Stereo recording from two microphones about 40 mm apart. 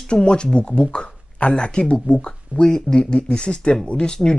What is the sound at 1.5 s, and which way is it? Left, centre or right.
Speech, centre.